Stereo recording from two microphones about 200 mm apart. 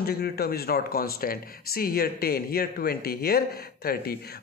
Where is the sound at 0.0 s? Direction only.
50° left (ahead or behind).